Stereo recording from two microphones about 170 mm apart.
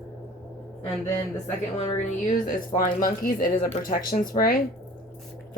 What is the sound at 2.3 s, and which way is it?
A woman's voice, 50° left (ahead or behind).